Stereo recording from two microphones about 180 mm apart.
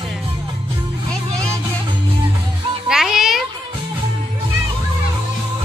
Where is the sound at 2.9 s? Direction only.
Centre (ahead or behind).